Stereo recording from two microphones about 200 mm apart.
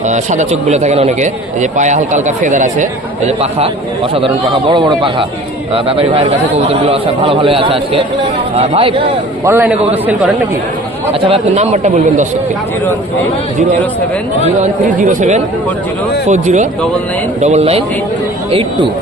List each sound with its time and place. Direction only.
0.1 s a man's voice: 35° right (ahead or behind)
9.4 s a man's voice: 10° right (ahead or behind)
11.1 s a man's voice: 30° right (ahead or behind)
14.4 s a man's voice: 35° right (ahead or behind)